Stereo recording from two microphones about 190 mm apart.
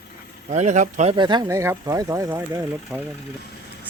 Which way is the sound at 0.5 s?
40° right (ahead or behind).